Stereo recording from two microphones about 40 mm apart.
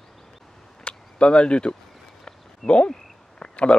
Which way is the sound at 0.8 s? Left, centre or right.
Left.